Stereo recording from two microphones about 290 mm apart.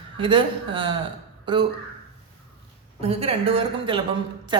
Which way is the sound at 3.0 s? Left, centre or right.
Centre.